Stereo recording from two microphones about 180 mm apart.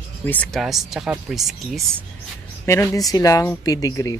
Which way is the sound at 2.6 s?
15° left (ahead or behind).